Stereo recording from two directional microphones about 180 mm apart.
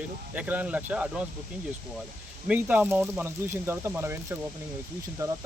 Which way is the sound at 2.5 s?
10° right (ahead or behind).